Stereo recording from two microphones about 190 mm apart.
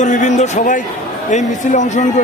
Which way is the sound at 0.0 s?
40° left (ahead or behind).